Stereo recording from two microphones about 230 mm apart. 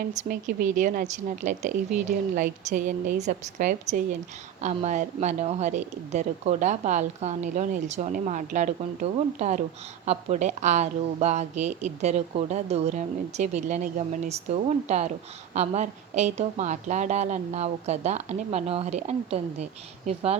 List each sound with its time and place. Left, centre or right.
0.2 s a woman's voice: right